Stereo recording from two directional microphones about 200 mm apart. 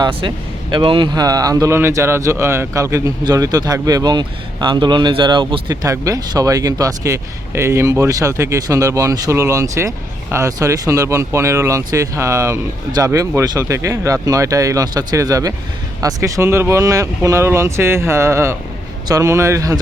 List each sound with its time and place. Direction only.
0.0 s speech: 25° right (ahead or behind)